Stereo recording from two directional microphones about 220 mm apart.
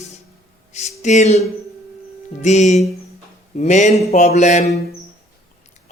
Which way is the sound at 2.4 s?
30° left (ahead or behind).